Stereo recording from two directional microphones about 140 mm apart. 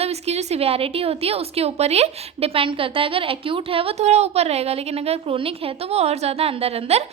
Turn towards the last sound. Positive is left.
turn(degrees=-45)  # may be behind; listen again after turning